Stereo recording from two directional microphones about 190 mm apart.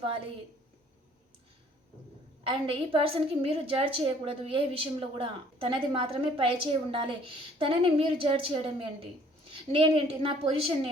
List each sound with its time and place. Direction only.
2.4 s a woman's voice: 30° right (ahead or behind)